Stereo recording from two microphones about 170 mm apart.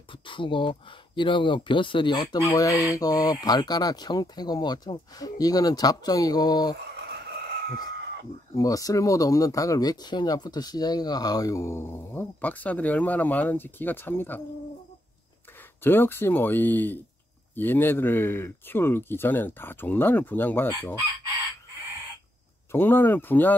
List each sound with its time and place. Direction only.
0.3 s speech: 30° left (ahead or behind)
8.5 s speech: 20° left (ahead or behind)
15.8 s speech: 10° left (ahead or behind)
22.7 s speech: 10° left (ahead or behind)